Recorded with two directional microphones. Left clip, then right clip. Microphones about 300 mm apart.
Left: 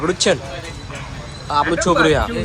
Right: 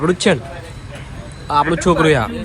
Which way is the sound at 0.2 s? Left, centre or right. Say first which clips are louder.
Even; right.